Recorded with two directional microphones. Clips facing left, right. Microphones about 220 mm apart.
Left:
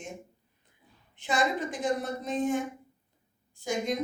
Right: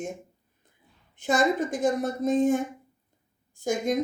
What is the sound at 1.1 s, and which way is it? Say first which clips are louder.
A woman's voice: right 5 dB; 45° right (ahead or behind).